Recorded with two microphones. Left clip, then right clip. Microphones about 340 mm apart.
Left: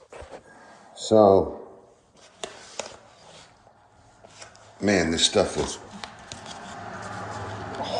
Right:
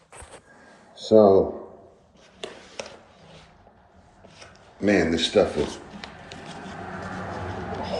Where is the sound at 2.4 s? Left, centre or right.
Centre.